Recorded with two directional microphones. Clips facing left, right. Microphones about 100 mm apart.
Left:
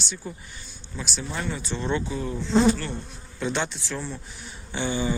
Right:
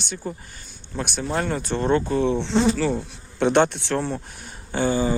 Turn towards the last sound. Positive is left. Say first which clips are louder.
# right 5 dB
turn(degrees=-40)  # may be behind; listen again after turning